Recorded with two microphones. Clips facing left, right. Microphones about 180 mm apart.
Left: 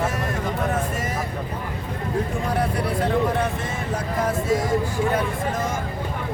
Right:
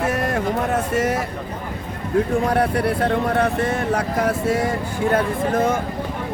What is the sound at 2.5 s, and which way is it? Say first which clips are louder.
Speech: right 4 dB; 65° right (ahead or behind).